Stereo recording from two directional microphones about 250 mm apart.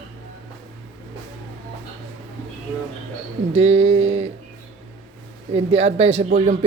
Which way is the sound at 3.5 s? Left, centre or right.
Right.